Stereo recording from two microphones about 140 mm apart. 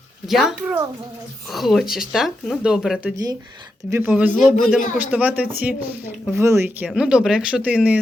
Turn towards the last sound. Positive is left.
turn(degrees=-10)  # may be behind; listen again after turning